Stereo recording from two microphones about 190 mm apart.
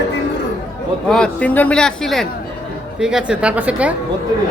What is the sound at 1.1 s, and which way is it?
A woman's voice, 5° left (ahead or behind).